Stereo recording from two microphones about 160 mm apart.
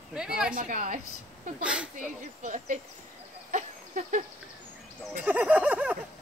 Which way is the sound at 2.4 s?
50° right (ahead or behind).